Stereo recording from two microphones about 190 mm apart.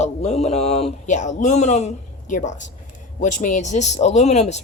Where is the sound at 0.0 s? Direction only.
35° left (ahead or behind).